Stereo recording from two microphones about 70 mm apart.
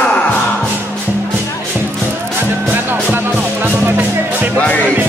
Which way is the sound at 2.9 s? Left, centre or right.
Right.